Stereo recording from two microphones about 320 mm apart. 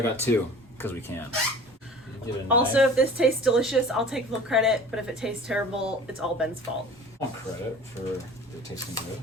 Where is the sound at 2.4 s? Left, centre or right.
Centre.